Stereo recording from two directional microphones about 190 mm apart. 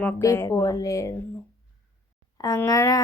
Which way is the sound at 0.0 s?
15° left (ahead or behind).